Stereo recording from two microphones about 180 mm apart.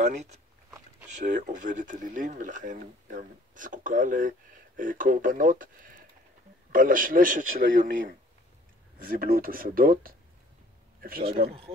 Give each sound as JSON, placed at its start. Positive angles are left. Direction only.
{"t": 0.0, "sound": "speech", "side_deg": -40}
{"t": 8.9, "sound": "speech", "side_deg": -55}